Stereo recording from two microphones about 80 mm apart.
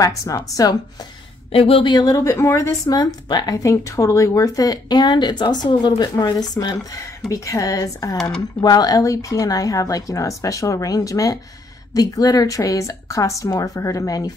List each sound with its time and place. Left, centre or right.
0.0 s speech: left
1.8 s speech: left
2.1 s speech: left
2.9 s speech: left
4.9 s speech: left
7.2 s speech: left
8.4 s speech: left